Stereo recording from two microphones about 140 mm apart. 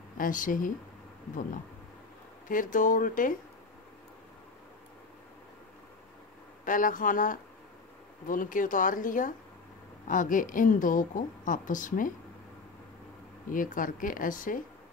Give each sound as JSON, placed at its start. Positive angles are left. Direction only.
{"t": 0.2, "sound": "a woman's voice", "side_deg": 70}
{"t": 2.4, "sound": "a woman's voice", "side_deg": 75}
{"t": 6.6, "sound": "a woman's voice", "side_deg": 70}
{"t": 13.5, "sound": "a woman's voice", "side_deg": 75}